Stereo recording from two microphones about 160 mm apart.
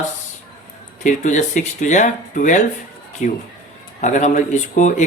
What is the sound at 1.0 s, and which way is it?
Speech, 50° left (ahead or behind).